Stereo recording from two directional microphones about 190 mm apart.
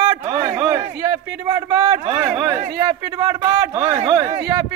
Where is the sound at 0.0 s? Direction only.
25° right (ahead or behind).